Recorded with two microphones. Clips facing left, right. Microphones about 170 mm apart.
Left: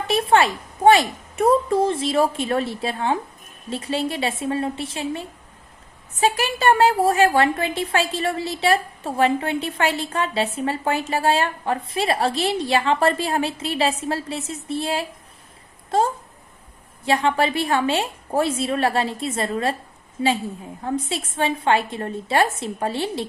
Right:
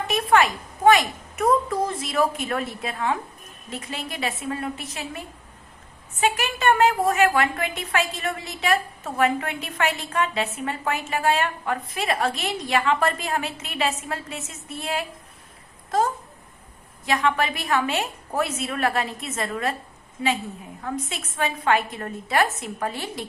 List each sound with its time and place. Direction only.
0.1 s a woman's voice: 30° left (ahead or behind)